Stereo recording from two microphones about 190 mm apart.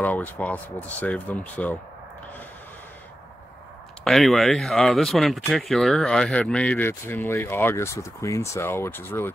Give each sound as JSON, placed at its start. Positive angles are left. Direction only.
{"t": 0.0, "sound": "speech", "side_deg": 10}
{"t": 4.0, "sound": "speech", "side_deg": 0}